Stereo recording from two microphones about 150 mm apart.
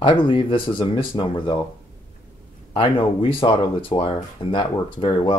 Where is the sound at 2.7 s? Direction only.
35° left (ahead or behind).